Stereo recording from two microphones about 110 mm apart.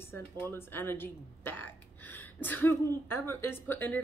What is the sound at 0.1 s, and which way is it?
Speech, 20° left (ahead or behind).